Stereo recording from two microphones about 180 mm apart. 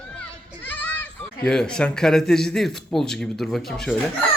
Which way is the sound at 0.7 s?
10° left (ahead or behind).